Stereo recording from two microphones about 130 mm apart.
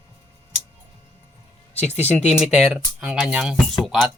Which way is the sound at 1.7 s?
55° left (ahead or behind).